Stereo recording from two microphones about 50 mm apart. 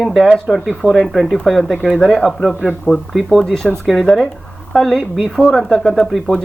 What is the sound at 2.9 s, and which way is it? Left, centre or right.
Speech, left.